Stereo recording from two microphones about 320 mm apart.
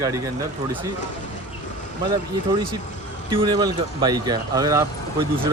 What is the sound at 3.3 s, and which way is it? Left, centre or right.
Speech, centre.